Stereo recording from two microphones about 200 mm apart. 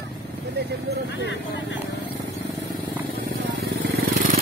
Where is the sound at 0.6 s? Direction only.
55° right (ahead or behind).